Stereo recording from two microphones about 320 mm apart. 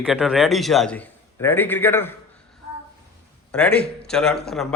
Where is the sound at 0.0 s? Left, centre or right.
Centre.